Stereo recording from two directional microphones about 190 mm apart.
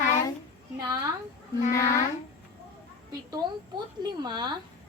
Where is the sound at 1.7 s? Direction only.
15° left (ahead or behind).